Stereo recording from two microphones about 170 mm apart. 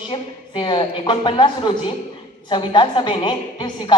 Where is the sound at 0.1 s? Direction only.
25° left (ahead or behind).